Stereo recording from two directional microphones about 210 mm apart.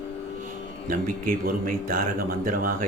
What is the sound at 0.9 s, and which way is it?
A man's voice, 40° right (ahead or behind).